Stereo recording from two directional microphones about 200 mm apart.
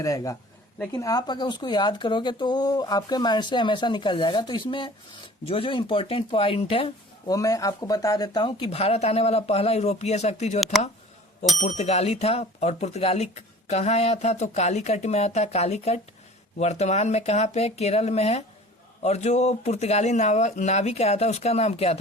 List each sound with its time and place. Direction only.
0.0 s speech: 15° left (ahead or behind); by 10.6 s 35° left (ahead or behind)
10.6 s speech: centre (ahead or behind)
11.5 s speech: 35° left (ahead or behind)